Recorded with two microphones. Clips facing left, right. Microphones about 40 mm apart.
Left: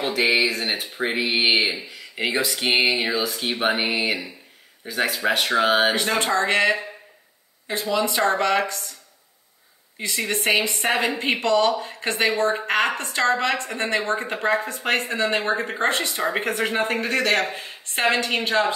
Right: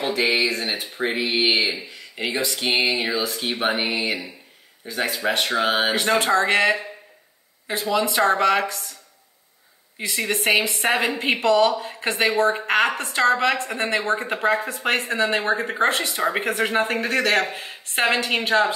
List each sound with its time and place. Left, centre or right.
0.3 s a woman's voice: centre
2.6 s a sound: centre
2.9 s a woman's voice: centre
9.9 s a woman's voice: centre